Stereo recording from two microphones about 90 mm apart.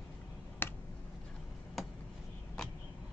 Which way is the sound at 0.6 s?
25° left (ahead or behind).